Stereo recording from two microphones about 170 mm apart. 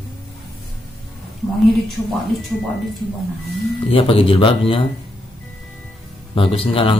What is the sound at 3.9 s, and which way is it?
Speech, 35° left (ahead or behind).